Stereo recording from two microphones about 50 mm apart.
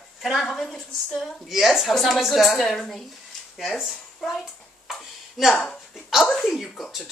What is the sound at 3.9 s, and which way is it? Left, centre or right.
Speech, centre.